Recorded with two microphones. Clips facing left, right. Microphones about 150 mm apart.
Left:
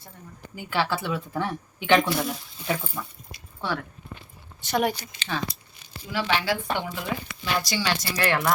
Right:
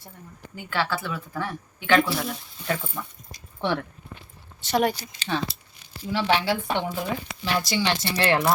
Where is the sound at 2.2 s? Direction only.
5° left (ahead or behind).